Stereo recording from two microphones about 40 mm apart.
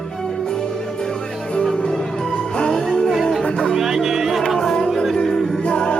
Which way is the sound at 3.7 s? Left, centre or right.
Centre.